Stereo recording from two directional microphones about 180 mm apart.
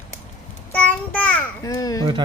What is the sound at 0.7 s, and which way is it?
Child singing, 10° left (ahead or behind).